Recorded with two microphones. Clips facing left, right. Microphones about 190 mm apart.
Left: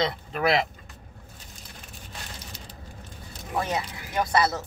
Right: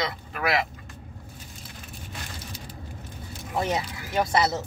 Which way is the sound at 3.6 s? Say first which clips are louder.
Right 1 dB; 20° right (ahead or behind).